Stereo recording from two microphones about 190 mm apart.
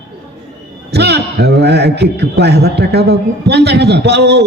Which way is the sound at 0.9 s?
60° right (ahead or behind).